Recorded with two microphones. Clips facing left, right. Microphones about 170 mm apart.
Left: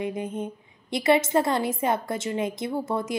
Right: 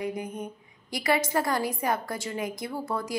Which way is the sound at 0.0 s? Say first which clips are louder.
Left 3 dB; 25° left (ahead or behind).